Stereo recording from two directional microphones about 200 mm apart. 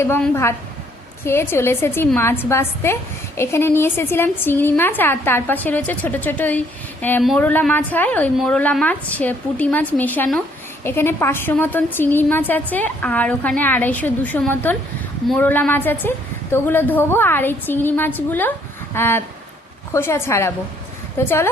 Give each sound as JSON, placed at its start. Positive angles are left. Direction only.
{"t": 0.0, "sound": "a woman's voice", "side_deg": 10}